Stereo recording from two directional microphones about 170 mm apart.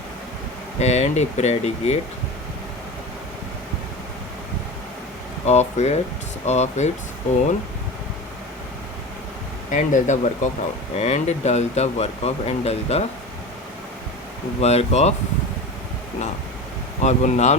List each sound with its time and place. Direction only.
0.8 s speech: 40° left (ahead or behind)
5.5 s speech: 40° left (ahead or behind)
9.7 s speech: 45° left (ahead or behind)
14.6 s speech: 40° left (ahead or behind)
17.0 s speech: 45° left (ahead or behind)